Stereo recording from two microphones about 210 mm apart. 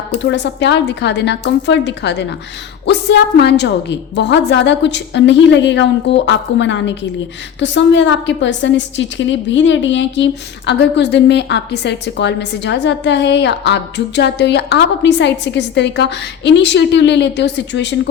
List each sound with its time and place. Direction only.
0.2 s a woman's voice: 55° left (ahead or behind)